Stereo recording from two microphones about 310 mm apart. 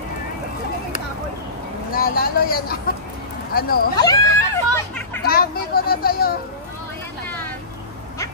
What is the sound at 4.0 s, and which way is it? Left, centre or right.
Speech, centre.